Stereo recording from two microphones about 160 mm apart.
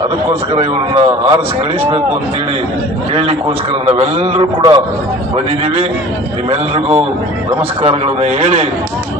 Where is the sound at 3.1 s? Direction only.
35° right (ahead or behind).